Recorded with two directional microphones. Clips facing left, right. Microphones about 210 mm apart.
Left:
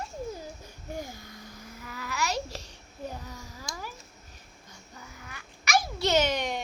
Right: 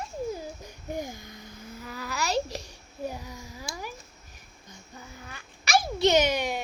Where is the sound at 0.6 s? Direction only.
20° right (ahead or behind).